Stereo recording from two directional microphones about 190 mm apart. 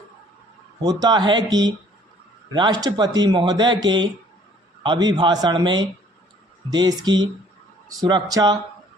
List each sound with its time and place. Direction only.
0.8 s speech: 20° right (ahead or behind)